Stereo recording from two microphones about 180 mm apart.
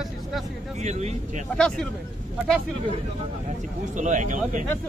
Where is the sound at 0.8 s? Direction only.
40° right (ahead or behind).